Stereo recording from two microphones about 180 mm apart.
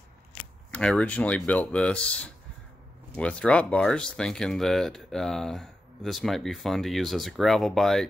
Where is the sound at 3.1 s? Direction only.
5° left (ahead or behind).